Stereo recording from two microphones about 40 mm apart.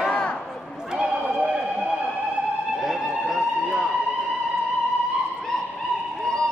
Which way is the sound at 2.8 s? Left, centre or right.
Centre.